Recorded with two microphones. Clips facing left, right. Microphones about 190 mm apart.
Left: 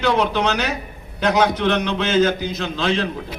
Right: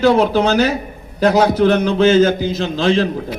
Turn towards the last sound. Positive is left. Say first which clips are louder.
# right 6 dB
turn(degrees=-40)  # may be behind; listen again after turning